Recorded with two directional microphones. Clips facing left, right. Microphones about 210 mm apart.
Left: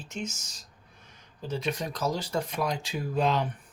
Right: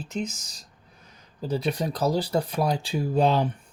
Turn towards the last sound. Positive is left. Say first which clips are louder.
# right 5 dB
turn(degrees=-30)  # may be behind; listen again after turning